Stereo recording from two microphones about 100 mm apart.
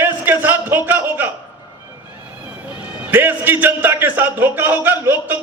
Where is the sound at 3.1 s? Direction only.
20° right (ahead or behind).